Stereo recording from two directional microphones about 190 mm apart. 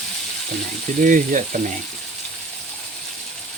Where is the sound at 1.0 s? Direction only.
45° right (ahead or behind).